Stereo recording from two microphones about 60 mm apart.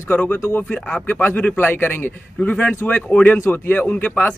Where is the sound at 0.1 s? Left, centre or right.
Left.